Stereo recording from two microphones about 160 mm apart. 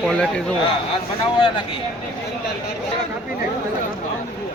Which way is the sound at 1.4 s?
35° left (ahead or behind).